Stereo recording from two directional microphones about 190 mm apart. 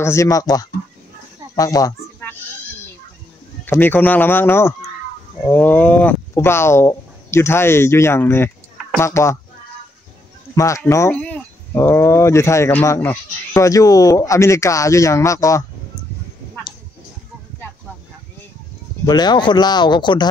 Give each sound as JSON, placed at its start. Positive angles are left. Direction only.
{"t": 0.0, "sound": "speech", "side_deg": 15}
{"t": 1.5, "sound": "a sound", "side_deg": 20}
{"t": 3.6, "sound": "speech", "side_deg": 10}
{"t": 10.5, "sound": "speech", "side_deg": 15}
{"t": 19.0, "sound": "speech", "side_deg": 20}